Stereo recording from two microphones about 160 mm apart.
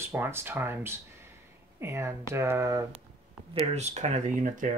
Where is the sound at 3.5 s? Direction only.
40° right (ahead or behind).